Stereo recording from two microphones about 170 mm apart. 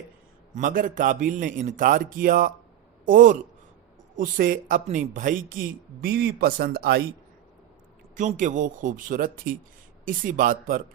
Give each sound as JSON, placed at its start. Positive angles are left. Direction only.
{"t": 0.5, "sound": "a man's voice", "side_deg": -50}
{"t": 8.1, "sound": "a man's voice", "side_deg": -50}